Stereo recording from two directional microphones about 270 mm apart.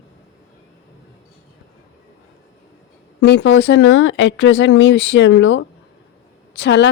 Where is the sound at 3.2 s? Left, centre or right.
Left.